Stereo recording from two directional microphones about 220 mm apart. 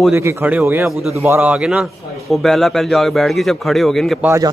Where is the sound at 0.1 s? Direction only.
10° right (ahead or behind).